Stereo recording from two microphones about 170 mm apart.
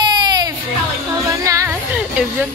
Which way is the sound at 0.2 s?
25° right (ahead or behind).